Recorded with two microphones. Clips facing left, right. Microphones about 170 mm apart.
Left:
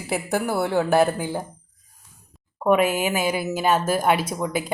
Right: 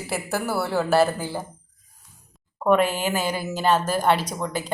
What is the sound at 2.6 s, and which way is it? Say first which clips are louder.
A woman's voice: left 1 dB; 10° left (ahead or behind).